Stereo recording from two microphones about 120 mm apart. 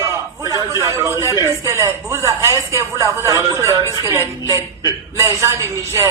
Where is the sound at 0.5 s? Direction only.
20° right (ahead or behind).